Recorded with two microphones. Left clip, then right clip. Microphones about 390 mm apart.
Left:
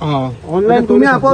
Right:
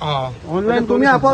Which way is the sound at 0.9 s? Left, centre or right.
Right.